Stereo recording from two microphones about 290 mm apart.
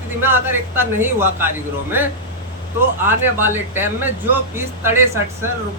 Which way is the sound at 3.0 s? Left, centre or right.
Centre.